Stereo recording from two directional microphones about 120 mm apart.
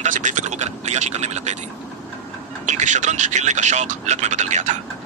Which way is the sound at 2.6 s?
90° right.